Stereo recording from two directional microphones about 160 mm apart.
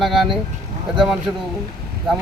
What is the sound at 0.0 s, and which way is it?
Speech, centre (ahead or behind).